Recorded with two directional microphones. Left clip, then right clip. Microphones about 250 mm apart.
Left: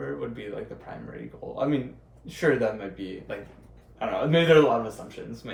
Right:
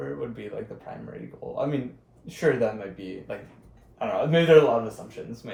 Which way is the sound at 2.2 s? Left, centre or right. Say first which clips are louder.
Even; centre.